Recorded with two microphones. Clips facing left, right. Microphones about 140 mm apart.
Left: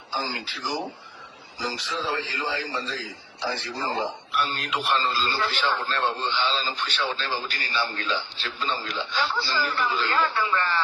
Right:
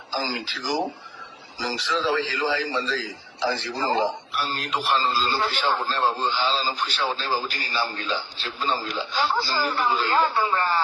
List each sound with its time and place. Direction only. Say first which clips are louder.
0.1 s a man's voice: right 2 dB; 90° right
4.4 s a man's voice: right 2 dB; centre (ahead or behind)
5.0 s a man's voice: right 2 dB; 40° right (ahead or behind)